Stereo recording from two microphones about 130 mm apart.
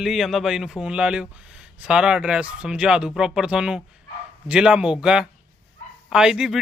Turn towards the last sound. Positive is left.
turn(degrees=-5)  # may be behind; listen again after turning